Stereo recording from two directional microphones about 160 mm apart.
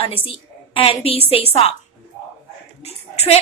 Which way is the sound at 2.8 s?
40° left (ahead or behind).